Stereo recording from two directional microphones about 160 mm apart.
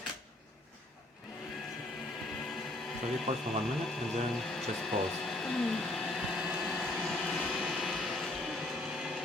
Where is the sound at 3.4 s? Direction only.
Centre (ahead or behind).